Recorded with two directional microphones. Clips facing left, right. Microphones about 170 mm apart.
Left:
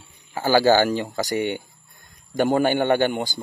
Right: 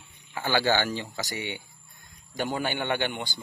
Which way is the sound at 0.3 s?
40° left (ahead or behind).